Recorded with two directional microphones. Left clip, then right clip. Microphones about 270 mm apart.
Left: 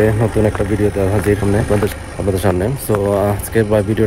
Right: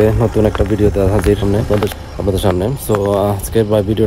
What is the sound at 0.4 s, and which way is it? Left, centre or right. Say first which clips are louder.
Speech: right 3 dB; centre.